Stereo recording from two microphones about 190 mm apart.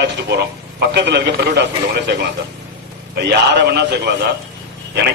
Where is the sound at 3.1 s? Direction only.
60° right (ahead or behind).